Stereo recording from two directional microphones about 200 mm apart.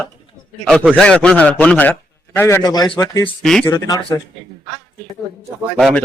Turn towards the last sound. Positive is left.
turn(degrees=0)  # may be behind; listen again after turning